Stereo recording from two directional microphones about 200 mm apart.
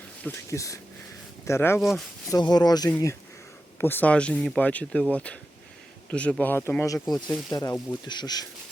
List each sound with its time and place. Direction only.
0.3 s speech: 15° left (ahead or behind)
1.8 s speech: centre (ahead or behind)
2.3 s speech: 20° left (ahead or behind)